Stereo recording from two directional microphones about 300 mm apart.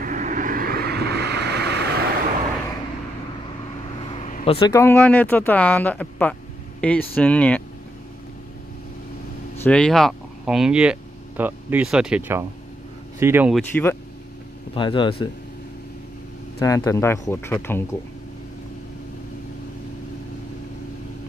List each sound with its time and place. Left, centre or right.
0.0 s vehicle: right
4.0 s speech: left; by 7.6 s centre
9.6 s speech: centre
13.7 s speech: centre
16.5 s speech: centre